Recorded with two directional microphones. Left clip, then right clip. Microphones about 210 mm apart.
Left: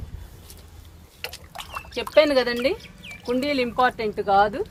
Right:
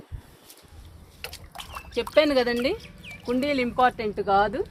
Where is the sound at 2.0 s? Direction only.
30° right (ahead or behind).